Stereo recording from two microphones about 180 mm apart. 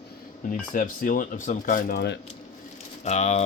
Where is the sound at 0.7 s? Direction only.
50° left (ahead or behind); by 2.1 s 65° left (ahead or behind).